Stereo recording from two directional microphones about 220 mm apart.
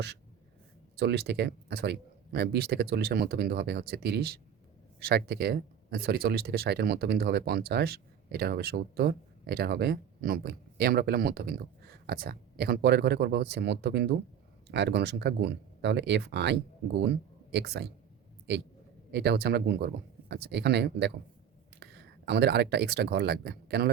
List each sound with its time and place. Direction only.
0.9 s speech: 50° right (ahead or behind)
19.1 s speech: 50° right (ahead or behind)